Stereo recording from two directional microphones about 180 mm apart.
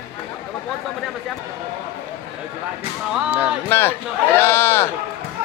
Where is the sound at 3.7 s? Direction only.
10° left (ahead or behind).